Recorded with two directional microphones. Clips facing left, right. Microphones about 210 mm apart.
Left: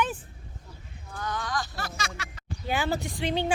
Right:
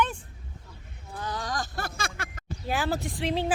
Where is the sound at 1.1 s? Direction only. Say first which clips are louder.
Even; 30° right (ahead or behind); by 2.4 s 55° right (ahead or behind).